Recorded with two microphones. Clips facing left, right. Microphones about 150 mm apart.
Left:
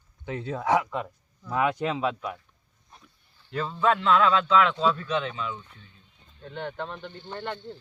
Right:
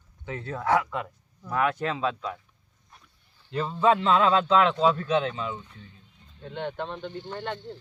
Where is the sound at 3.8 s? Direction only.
30° right (ahead or behind).